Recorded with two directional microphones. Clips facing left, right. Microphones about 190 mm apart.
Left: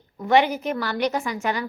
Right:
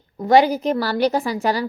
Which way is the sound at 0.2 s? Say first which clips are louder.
Right 4 dB; 35° right (ahead or behind).